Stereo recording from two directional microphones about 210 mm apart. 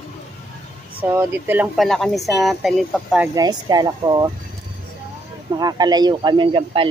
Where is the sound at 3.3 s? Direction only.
20° right (ahead or behind).